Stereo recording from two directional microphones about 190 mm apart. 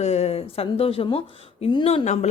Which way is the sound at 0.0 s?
35° left (ahead or behind).